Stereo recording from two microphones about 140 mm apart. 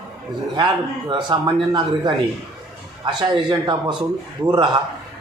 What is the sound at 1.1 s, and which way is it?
Speech, 30° right (ahead or behind).